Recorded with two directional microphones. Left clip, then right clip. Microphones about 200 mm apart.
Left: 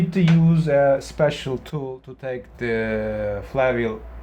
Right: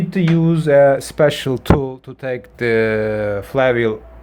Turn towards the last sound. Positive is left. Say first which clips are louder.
# right 5 dB
turn(degrees=-50)  # may be behind; listen again after turning